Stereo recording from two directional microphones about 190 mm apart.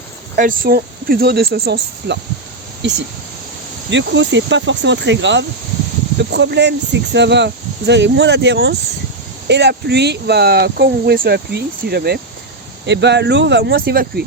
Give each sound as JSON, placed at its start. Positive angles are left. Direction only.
{"t": 0.3, "sound": "speech", "side_deg": -45}
{"t": 3.8, "sound": "speech", "side_deg": -70}